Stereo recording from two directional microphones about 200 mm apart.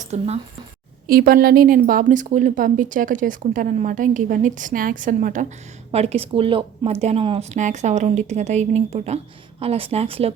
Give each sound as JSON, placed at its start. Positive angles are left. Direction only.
{"t": 0.0, "sound": "speech", "side_deg": -35}
{"t": 1.0, "sound": "a woman's voice", "side_deg": -45}